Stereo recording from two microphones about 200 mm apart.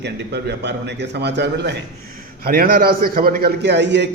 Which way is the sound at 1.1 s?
55° right (ahead or behind).